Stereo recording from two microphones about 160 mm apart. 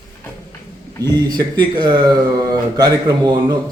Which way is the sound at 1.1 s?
30° right (ahead or behind).